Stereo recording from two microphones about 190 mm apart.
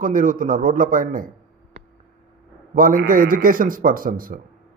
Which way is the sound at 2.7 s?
50° right (ahead or behind).